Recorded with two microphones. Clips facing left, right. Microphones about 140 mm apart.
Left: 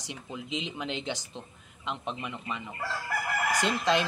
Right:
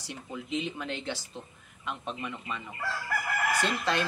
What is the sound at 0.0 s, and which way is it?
Speech, 15° left (ahead or behind).